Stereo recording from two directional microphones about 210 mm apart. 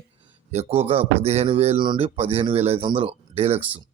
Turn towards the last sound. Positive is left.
turn(degrees=-30)  # may be behind; listen again after turning